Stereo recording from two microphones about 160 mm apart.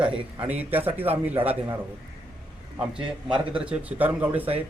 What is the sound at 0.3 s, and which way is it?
Speech, 10° right (ahead or behind).